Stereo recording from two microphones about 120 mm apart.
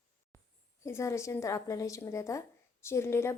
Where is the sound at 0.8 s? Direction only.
25° left (ahead or behind).